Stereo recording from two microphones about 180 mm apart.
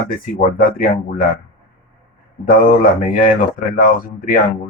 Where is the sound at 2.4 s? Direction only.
50° left (ahead or behind).